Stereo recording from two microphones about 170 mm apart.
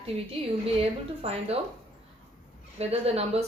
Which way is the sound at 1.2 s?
35° right (ahead or behind).